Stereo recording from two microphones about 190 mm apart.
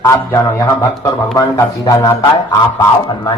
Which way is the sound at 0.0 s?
15° left (ahead or behind).